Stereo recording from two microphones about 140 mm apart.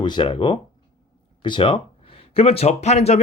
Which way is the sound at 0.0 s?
35° left (ahead or behind).